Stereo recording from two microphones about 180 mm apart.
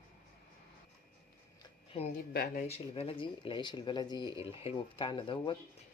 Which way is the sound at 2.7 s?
35° left (ahead or behind).